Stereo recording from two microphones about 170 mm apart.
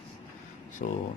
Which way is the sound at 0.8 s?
45° left (ahead or behind).